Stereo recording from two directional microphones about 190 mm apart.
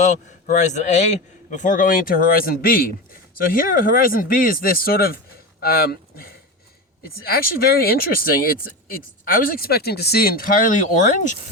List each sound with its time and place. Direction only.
0.0 s a man's voice: 40° left (ahead or behind)
9.2 s a man's voice: 50° left (ahead or behind)